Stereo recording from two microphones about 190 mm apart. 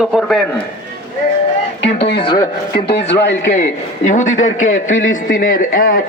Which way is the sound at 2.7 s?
60° left (ahead or behind).